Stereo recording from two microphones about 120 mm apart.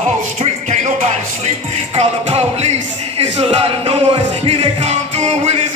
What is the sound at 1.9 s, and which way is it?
Music, 55° right (ahead or behind).